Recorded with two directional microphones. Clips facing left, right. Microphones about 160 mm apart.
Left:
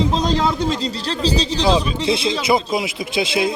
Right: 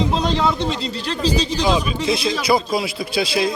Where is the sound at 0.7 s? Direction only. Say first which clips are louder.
Left 2 dB; 35° left (ahead or behind).